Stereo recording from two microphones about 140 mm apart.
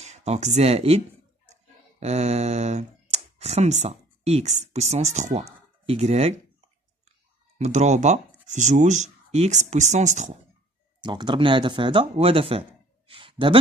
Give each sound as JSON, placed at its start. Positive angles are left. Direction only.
{"t": 0.0, "sound": "speech", "side_deg": -50}
{"t": 7.5, "sound": "speech", "side_deg": -55}
{"t": 11.0, "sound": "speech", "side_deg": -35}